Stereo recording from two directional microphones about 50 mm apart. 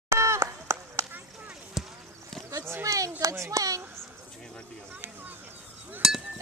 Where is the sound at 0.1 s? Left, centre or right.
Right.